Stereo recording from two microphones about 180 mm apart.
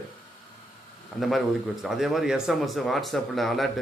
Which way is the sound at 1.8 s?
Centre (ahead or behind).